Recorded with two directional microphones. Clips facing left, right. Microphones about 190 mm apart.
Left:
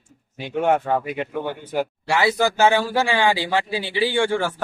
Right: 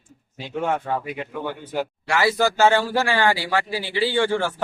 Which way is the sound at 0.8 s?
55° left (ahead or behind).